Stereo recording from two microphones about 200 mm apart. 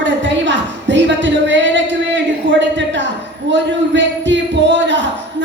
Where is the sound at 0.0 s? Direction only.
65° right (ahead or behind).